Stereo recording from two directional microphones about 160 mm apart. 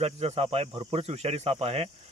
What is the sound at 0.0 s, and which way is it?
Speech, 40° right (ahead or behind).